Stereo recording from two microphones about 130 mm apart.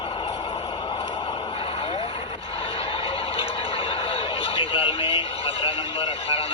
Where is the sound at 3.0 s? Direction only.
45° left (ahead or behind).